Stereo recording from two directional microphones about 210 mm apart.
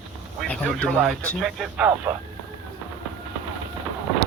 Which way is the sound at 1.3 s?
Centre (ahead or behind).